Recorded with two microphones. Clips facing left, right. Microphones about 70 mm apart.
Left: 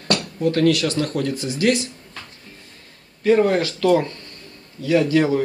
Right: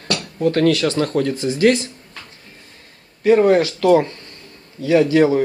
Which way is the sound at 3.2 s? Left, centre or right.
Right.